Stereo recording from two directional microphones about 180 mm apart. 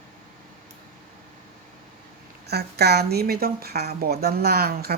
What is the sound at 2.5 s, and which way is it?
A woman's voice, 65° right (ahead or behind).